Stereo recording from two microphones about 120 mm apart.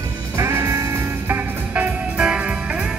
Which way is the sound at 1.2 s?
15° right (ahead or behind).